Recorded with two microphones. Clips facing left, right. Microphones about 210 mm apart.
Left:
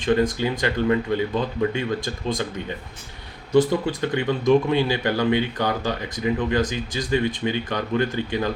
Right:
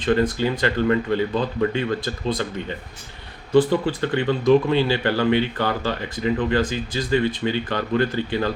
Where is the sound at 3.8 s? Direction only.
10° left (ahead or behind).